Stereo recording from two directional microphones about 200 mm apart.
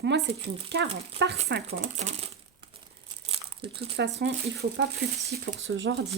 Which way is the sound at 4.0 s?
60° right (ahead or behind).